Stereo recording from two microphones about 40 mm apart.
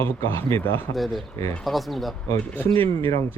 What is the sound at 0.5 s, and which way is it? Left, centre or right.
Speech, left.